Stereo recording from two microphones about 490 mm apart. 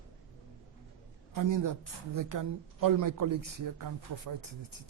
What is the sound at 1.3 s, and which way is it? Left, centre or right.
Speech, right.